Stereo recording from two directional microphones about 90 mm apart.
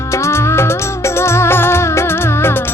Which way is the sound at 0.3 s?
30° left (ahead or behind).